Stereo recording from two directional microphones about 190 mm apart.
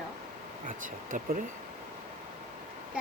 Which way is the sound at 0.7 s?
45° right (ahead or behind).